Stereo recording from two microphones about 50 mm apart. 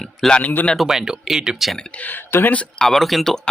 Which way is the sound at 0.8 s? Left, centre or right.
Centre.